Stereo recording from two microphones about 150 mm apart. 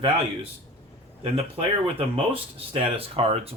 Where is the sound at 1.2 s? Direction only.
40° right (ahead or behind).